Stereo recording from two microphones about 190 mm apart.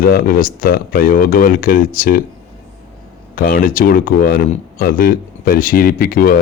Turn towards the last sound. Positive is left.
turn(degrees=50)  # may be behind; listen again after turning